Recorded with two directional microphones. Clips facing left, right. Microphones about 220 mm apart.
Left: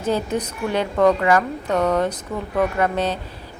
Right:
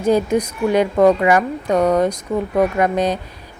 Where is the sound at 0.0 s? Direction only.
10° right (ahead or behind).